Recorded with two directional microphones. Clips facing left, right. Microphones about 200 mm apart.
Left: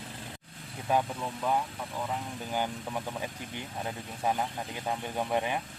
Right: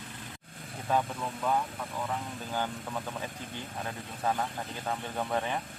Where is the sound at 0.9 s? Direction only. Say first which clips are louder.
Left 1 dB; 10° left (ahead or behind).